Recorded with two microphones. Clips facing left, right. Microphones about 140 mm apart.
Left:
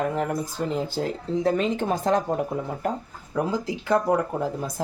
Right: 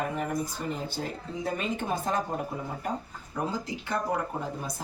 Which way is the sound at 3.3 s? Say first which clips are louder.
Left 6 dB; 90° left.